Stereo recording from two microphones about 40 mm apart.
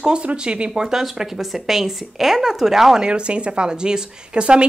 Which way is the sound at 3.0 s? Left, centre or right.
Right.